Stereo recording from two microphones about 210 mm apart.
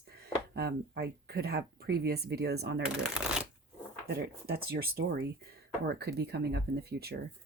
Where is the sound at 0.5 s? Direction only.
50° right (ahead or behind).